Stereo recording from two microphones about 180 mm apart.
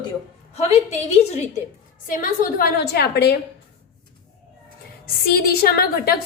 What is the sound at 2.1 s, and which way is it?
A woman's voice, 50° left (ahead or behind).